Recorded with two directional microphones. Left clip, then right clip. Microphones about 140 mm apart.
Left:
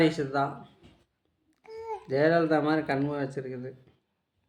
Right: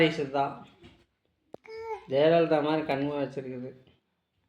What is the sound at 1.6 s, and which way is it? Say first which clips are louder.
A child's voice: left 1 dB; 45° left (ahead or behind).